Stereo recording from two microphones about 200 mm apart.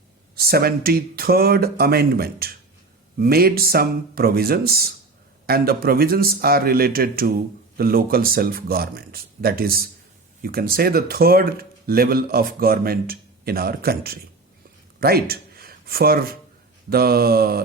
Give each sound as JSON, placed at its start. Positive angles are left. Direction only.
{"t": 0.3, "sound": "speech", "side_deg": -50}